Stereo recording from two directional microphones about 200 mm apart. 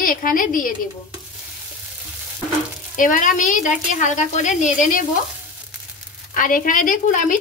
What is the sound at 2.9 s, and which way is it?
Speech, 40° left (ahead or behind).